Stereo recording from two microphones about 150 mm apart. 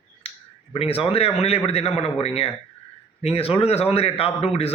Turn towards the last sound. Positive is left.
turn(degrees=40)  # may be behind; listen again after turning